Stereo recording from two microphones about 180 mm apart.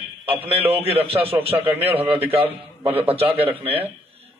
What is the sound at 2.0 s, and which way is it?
Speech, 10° right (ahead or behind).